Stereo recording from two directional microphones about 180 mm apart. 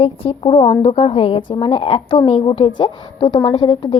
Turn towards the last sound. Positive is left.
turn(degrees=25)  # may be behind; listen again after turning